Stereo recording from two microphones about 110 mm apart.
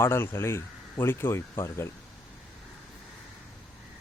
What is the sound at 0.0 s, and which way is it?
Speech, 20° left (ahead or behind).